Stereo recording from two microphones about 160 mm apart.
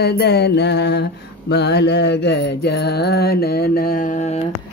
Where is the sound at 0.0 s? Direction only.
90° left; by 4.5 s 45° left (ahead or behind).